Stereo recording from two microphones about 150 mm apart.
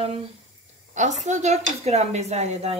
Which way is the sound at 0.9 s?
50° right (ahead or behind).